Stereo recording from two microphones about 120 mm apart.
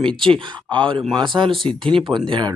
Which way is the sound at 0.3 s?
45° right (ahead or behind).